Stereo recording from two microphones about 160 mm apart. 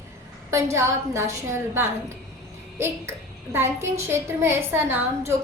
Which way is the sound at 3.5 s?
15° right (ahead or behind).